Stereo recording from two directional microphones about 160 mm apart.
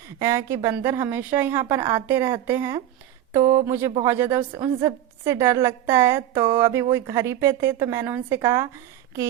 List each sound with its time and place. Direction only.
0.2 s a woman's voice: 20° right (ahead or behind)